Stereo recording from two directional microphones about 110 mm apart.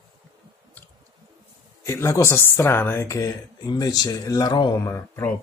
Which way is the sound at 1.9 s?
25° left (ahead or behind).